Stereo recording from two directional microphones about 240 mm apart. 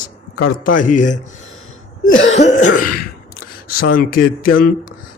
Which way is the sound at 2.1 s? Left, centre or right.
Left.